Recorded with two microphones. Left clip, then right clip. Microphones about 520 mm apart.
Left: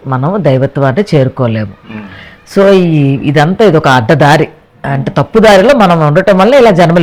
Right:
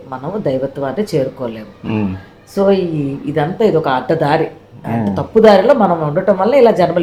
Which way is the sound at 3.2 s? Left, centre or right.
Left.